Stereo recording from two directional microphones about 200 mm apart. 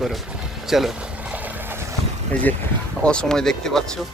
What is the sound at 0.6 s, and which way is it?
Boat, centre (ahead or behind).